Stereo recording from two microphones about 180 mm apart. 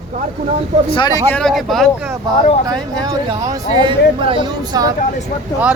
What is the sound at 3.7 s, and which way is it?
A woman's voice, 25° right (ahead or behind).